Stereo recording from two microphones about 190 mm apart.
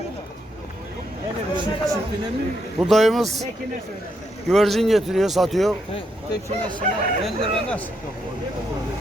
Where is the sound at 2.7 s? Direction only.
Centre (ahead or behind).